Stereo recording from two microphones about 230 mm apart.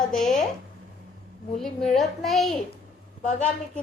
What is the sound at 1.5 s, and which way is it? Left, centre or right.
A child's voice, centre.